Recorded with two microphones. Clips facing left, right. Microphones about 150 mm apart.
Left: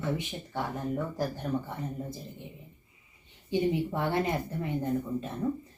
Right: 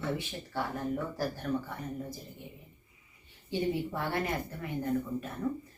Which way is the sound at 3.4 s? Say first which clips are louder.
Left 4 dB; 20° left (ahead or behind).